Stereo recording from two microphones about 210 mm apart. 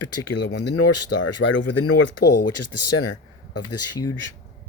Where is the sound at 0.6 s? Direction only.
55° left (ahead or behind); by 2.2 s 75° left (ahead or behind).